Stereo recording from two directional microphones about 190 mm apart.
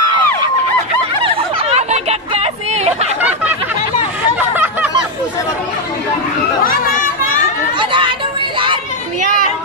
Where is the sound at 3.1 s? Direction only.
10° right (ahead or behind).